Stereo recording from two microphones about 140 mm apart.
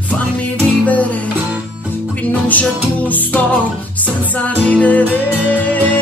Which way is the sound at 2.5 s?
10° left (ahead or behind).